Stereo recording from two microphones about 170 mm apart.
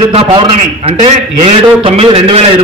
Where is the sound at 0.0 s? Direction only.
30° right (ahead or behind).